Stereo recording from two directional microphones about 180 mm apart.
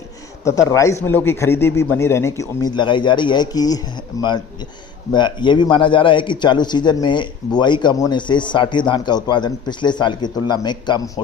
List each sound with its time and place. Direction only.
0.4 s a man's voice: 15° left (ahead or behind)